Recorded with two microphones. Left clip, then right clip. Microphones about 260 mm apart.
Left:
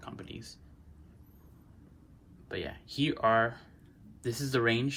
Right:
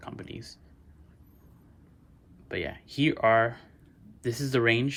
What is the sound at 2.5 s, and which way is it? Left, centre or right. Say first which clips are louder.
Speech: right 4 dB; centre.